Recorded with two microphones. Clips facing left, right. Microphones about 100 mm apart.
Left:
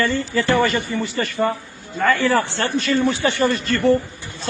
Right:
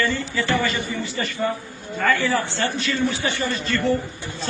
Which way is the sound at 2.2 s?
65° left (ahead or behind).